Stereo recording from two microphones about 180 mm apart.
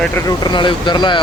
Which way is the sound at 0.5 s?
25° left (ahead or behind).